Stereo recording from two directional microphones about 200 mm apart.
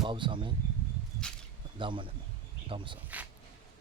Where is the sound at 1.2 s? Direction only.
5° left (ahead or behind).